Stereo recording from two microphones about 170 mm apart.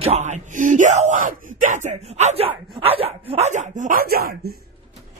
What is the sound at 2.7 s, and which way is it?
Speech, 35° right (ahead or behind).